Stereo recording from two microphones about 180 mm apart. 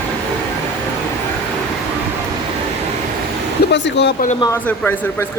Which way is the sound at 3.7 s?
75° left (ahead or behind).